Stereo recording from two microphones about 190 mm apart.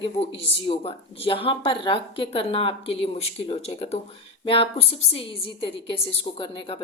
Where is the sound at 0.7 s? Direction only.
30° left (ahead or behind).